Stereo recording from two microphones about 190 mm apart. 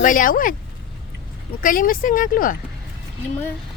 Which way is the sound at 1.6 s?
45° left (ahead or behind).